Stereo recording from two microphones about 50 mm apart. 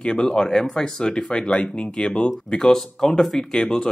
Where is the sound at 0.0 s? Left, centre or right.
Centre.